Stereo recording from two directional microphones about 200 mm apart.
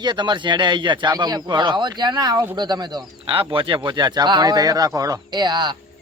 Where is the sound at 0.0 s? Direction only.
20° right (ahead or behind).